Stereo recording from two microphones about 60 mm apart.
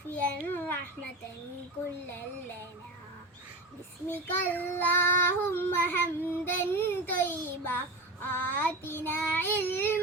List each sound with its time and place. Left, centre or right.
0.1 s babbling: left
4.1 s child singing: left